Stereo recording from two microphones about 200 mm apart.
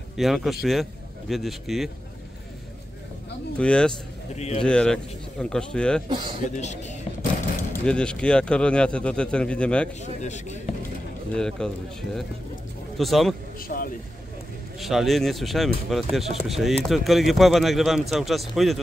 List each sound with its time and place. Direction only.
0.2 s speech: centre (ahead or behind)
3.5 s speech: 5° left (ahead or behind)
4.4 s speech: 30° left (ahead or behind)
4.6 s speech: 5° left (ahead or behind)
6.0 s a man's voice: 25° right (ahead or behind)
6.4 s speech: 35° left (ahead or behind)
7.8 s speech: 5° left (ahead or behind)
10.2 s speech: 35° left (ahead or behind)
11.3 s speech: 5° left (ahead or behind)
12.9 s speech: centre (ahead or behind)
13.6 s speech: 45° left (ahead or behind)
14.8 s speech: centre (ahead or behind)